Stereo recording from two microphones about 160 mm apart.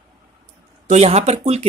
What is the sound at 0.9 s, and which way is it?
Speech, 40° right (ahead or behind).